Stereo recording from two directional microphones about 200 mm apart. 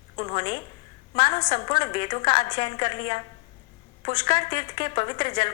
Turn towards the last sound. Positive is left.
turn(degrees=25)  # may be behind; listen again after turning